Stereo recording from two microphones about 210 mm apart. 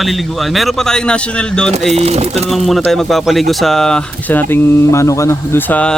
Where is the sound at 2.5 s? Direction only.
Centre (ahead or behind).